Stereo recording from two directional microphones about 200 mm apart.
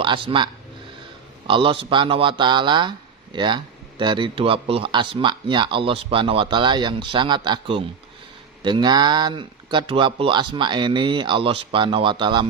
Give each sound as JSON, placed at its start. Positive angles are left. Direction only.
{"t": 0.0, "sound": "speech", "side_deg": -25}